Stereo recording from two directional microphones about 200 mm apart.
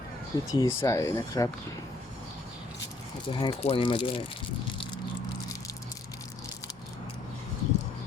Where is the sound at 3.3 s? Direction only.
25° left (ahead or behind).